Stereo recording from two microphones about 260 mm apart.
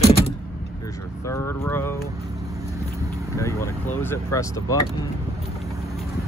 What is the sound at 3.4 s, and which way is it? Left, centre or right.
Speech, centre.